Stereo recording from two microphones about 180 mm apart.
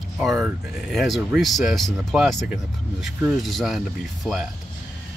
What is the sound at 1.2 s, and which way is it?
Speech, 10° right (ahead or behind).